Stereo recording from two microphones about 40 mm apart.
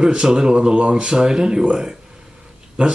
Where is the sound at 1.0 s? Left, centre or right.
Centre.